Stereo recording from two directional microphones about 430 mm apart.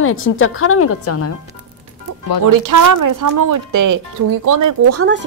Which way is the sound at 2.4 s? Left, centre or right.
Right.